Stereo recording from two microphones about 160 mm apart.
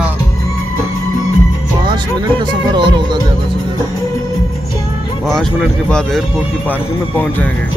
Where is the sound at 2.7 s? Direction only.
30° right (ahead or behind).